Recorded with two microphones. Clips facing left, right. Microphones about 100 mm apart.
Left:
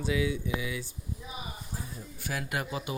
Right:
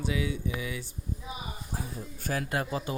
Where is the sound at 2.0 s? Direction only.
40° right (ahead or behind).